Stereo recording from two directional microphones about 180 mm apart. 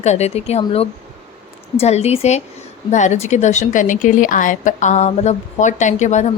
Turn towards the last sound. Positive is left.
turn(degrees=40)  # may be behind; listen again after turning